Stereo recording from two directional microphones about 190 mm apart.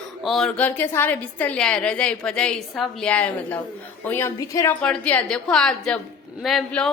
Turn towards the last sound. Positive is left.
turn(degrees=5)  # may be behind; listen again after turning